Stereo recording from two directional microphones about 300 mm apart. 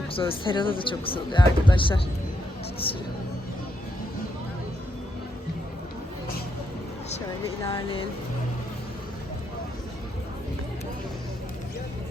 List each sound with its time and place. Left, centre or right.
0.1 s speech: centre
7.6 s speech: centre